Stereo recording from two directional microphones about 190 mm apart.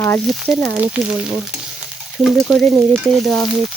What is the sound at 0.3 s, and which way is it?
Stir, centre (ahead or behind).